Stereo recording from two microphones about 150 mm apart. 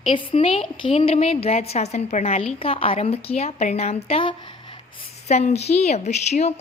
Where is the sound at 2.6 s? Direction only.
40° left (ahead or behind).